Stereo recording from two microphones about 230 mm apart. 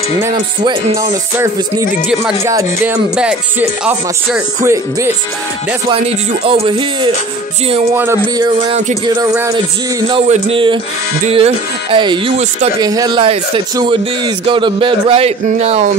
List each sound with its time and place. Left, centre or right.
2.4 s music: centre
5.9 s speech: right
7.9 s music: centre
8.6 s speech: right
9.0 s speech: centre